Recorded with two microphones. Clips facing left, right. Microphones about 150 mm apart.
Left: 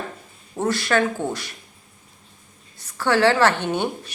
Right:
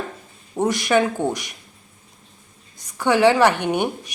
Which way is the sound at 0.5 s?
15° right (ahead or behind).